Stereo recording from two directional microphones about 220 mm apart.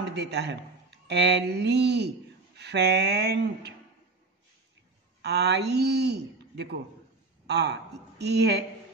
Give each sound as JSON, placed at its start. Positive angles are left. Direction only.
{"t": 0.1, "sound": "a man's voice", "side_deg": -50}
{"t": 5.2, "sound": "speech", "side_deg": -50}